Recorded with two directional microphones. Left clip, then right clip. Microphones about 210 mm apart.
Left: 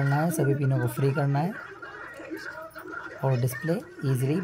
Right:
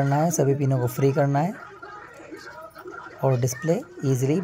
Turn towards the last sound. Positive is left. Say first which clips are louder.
# right 5 dB
turn(degrees=-15)  # may be behind; listen again after turning